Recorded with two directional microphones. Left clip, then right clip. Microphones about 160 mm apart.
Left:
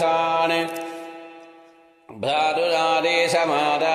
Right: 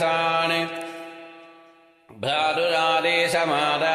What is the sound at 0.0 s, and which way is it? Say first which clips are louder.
Mantra: left 2 dB; 55° left (ahead or behind).